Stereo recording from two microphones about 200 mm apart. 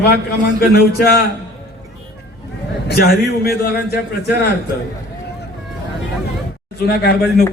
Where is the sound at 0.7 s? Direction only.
50° left (ahead or behind).